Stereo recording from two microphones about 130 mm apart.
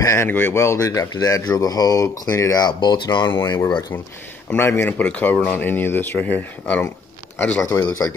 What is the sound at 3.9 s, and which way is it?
Speech, 15° left (ahead or behind).